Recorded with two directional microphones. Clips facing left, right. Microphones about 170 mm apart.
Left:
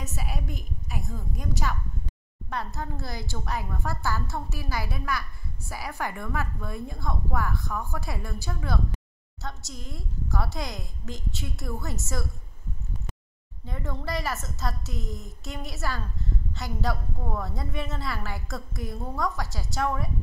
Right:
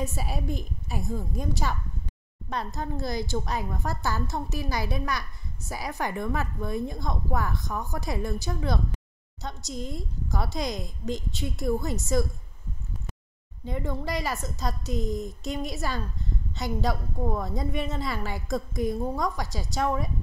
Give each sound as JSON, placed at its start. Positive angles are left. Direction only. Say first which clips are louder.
{"t": 0.0, "sound": "a woman's voice", "louder": "right 4 dB", "side_deg": -30}
{"t": 2.5, "sound": "a woman's voice", "louder": "right 2 dB", "side_deg": -15}
{"t": 13.7, "sound": "a woman's voice", "louder": "right 3 dB", "side_deg": -15}